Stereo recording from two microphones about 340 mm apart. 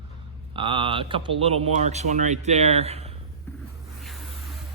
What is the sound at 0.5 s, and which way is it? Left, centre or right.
Speech, centre.